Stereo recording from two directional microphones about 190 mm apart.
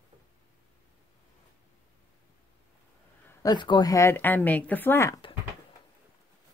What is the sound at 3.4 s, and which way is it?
Speech, 20° left (ahead or behind).